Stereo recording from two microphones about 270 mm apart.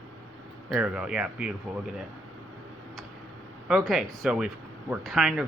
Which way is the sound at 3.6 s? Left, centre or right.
Centre.